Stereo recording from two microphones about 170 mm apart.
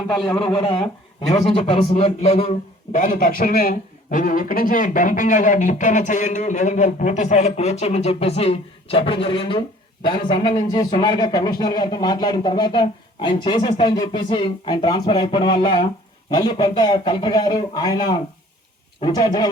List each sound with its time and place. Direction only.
0.3 s a man's voice: 30° left (ahead or behind)